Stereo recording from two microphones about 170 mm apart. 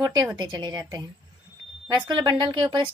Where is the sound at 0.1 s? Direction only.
25° right (ahead or behind).